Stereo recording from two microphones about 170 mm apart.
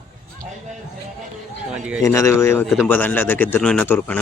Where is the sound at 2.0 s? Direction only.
20° left (ahead or behind).